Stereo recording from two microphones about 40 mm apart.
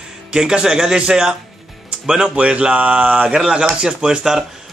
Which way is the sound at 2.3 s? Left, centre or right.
Right.